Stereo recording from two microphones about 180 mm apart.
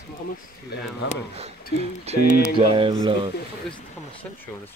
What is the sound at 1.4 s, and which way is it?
Speech, 35° right (ahead or behind).